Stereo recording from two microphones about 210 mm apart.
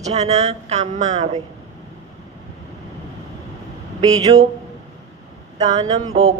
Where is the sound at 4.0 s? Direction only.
15° right (ahead or behind).